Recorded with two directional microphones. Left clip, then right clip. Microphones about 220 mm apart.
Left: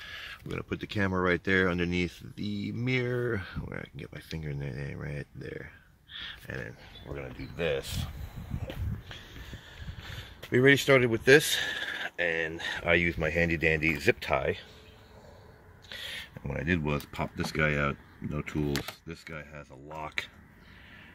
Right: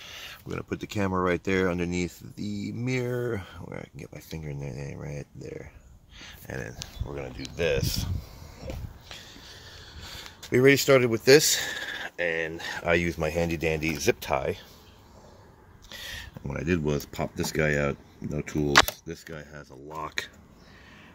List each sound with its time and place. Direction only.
0.0 s a sound: 10° right (ahead or behind)
1.2 s speech: centre (ahead or behind)
6.6 s speech: 20° right (ahead or behind)
7.5 s speech: 5° right (ahead or behind)
10.1 s speech: centre (ahead or behind)
15.9 s a sound: 5° right (ahead or behind)
16.4 s speech: centre (ahead or behind)
19.9 s speech: 5° left (ahead or behind)